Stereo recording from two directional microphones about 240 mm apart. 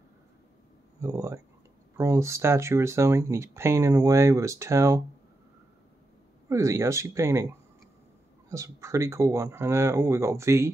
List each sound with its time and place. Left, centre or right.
1.0 s speech: centre
6.5 s speech: centre